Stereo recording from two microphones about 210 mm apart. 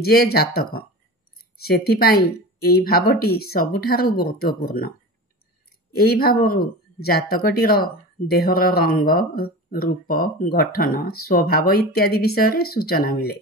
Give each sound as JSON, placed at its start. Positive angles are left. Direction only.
{"t": 0.0, "sound": "speech", "side_deg": 45}